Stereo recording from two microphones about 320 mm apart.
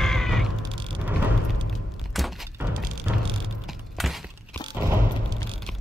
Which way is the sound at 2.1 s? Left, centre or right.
Centre.